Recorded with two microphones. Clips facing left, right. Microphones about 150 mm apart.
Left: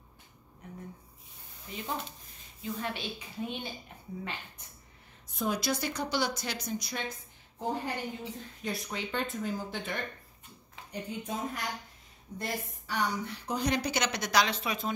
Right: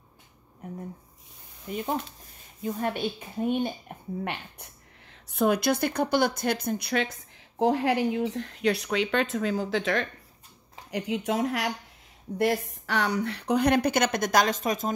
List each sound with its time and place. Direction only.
1.7 s a woman's voice: 55° right (ahead or behind)
4.2 s a woman's voice: 65° right (ahead or behind); by 14.9 s 45° right (ahead or behind)